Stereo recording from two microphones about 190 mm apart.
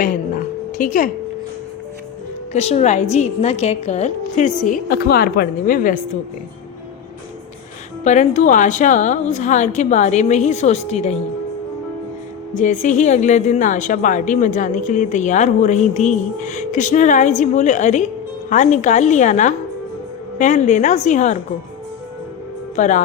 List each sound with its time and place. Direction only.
0.0 s music: 45° left (ahead or behind)
2.5 s a woman's voice: 35° left (ahead or behind)
8.0 s a woman's voice: 40° left (ahead or behind)
12.5 s a woman's voice: 40° left (ahead or behind)
22.7 s a woman's voice: 40° left (ahead or behind)